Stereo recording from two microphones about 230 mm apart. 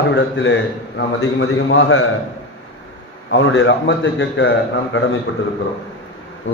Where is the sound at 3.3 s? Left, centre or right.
Left.